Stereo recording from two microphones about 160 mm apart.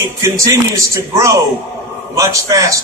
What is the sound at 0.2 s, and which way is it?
A man's voice, 20° right (ahead or behind).